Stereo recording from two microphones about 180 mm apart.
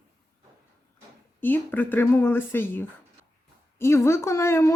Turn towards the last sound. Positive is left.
turn(degrees=15)  # may be behind; listen again after turning